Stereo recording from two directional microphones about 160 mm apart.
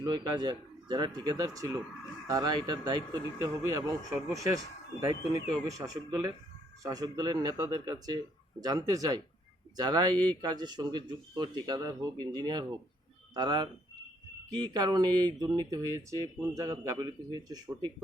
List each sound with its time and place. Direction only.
0.0 s speech: 25° right (ahead or behind)